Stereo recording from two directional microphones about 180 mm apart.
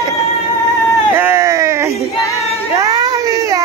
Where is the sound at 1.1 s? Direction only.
15° right (ahead or behind).